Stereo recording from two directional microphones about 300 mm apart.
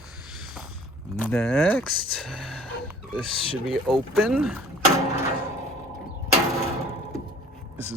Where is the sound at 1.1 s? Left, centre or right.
Centre.